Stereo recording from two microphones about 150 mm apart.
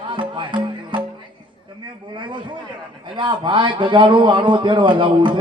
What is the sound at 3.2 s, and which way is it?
A man's voice, 30° right (ahead or behind).